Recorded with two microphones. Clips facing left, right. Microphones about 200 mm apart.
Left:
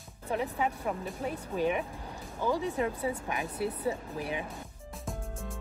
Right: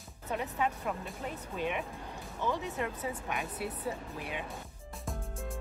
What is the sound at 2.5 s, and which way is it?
Speech, 30° left (ahead or behind).